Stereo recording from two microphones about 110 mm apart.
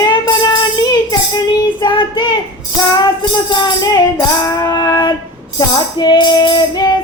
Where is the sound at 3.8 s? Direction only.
35° left (ahead or behind).